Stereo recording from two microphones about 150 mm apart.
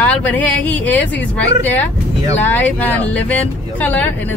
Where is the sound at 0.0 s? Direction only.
10° left (ahead or behind).